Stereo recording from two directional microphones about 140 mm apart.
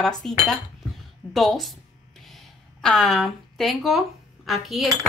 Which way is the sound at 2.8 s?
5° left (ahead or behind).